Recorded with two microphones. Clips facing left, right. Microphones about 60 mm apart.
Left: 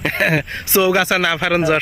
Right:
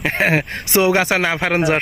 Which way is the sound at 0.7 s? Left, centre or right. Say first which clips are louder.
Even; right.